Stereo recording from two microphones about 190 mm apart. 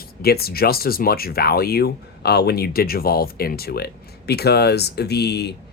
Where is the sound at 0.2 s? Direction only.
55° left (ahead or behind).